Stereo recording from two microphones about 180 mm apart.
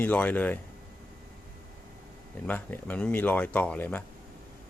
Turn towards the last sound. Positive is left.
turn(degrees=10)  # may be behind; listen again after turning